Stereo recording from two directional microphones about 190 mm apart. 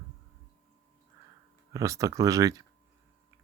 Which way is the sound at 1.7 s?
15° right (ahead or behind).